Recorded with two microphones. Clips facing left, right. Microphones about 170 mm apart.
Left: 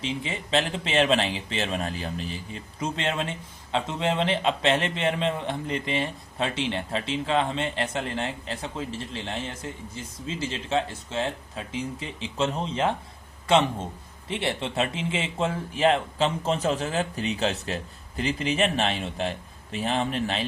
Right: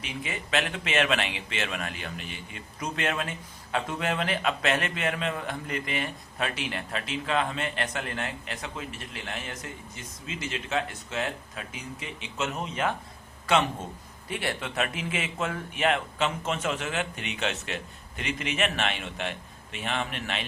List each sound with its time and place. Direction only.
0.0 s speech: 25° left (ahead or behind)